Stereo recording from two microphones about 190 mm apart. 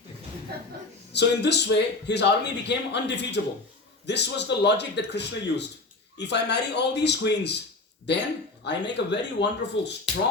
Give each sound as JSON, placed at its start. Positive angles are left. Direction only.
{"t": 1.1, "sound": "speech", "side_deg": 65}